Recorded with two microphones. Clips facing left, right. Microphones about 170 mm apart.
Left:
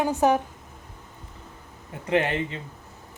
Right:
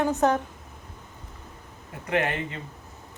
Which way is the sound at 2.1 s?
30° left (ahead or behind).